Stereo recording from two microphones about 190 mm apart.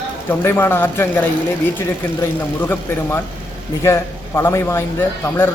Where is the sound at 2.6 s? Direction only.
10° left (ahead or behind).